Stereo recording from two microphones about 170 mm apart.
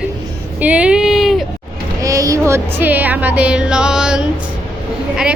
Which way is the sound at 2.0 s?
20° right (ahead or behind).